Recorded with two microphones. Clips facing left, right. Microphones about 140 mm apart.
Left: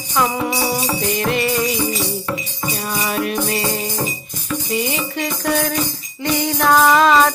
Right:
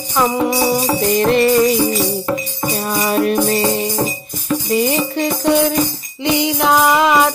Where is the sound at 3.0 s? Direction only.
40° right (ahead or behind).